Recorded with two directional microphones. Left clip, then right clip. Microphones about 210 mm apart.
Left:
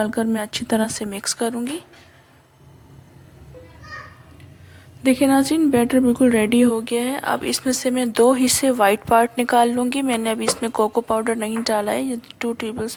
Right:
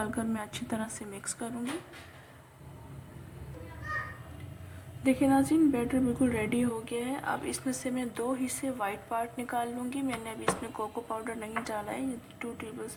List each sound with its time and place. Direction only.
0.0 s a woman's voice: 35° left (ahead or behind)
5.0 s a woman's voice: 40° left (ahead or behind)